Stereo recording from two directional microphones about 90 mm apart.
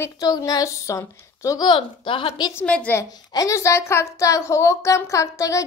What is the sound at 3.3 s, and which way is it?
Speech, 35° left (ahead or behind).